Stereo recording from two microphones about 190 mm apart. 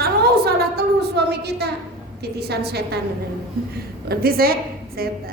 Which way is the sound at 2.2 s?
55° right (ahead or behind).